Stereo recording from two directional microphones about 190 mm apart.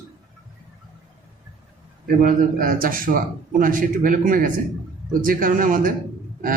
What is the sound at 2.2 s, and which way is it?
Speech, 45° right (ahead or behind).